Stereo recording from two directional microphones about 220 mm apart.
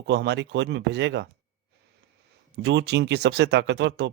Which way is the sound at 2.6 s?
50° right (ahead or behind).